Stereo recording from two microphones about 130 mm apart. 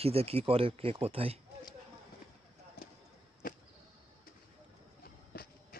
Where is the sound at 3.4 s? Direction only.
90° left.